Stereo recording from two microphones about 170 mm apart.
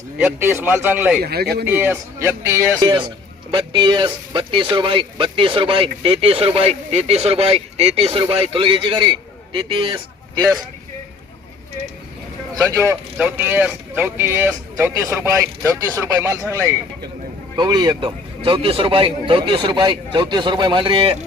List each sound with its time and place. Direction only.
0.2 s speech: 10° right (ahead or behind)
1.2 s speech: 70° right (ahead or behind)
1.6 s a man's voice: 10° right (ahead or behind); by 10.4 s 25° right (ahead or behind)
12.9 s a man's voice: 10° right (ahead or behind); by 21.2 s 30° right (ahead or behind)